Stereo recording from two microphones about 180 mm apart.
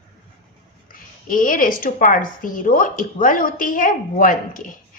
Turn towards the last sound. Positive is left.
turn(degrees=45)  # may be behind; listen again after turning